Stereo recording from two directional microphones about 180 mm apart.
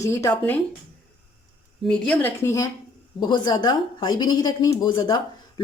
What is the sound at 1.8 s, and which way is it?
A woman's voice, 5° left (ahead or behind).